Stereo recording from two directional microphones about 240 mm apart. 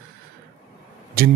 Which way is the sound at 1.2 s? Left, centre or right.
Right.